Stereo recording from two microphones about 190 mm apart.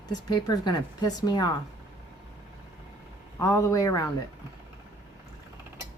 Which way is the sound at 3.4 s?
15° left (ahead or behind).